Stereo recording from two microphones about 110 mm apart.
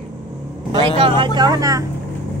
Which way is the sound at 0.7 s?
50° right (ahead or behind).